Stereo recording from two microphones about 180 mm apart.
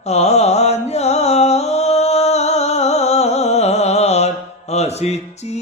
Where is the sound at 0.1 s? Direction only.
35° left (ahead or behind).